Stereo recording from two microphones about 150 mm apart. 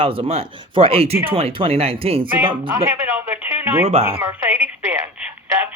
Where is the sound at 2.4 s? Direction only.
10° right (ahead or behind).